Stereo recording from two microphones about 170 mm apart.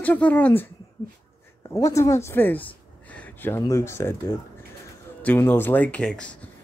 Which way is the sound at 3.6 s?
15° left (ahead or behind).